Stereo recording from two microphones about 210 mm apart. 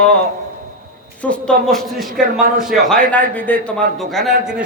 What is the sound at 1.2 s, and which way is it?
A man's voice, 5° left (ahead or behind).